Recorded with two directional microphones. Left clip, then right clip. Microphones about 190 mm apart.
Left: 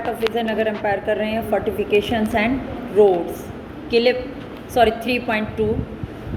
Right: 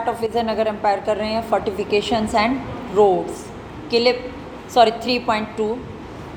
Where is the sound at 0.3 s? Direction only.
80° right.